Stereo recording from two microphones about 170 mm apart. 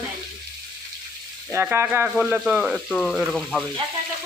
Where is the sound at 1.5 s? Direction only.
10° right (ahead or behind).